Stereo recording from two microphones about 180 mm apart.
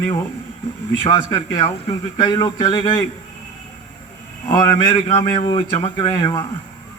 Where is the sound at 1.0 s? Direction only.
30° left (ahead or behind).